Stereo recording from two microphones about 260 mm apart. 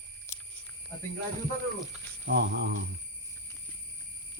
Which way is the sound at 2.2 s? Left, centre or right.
Right.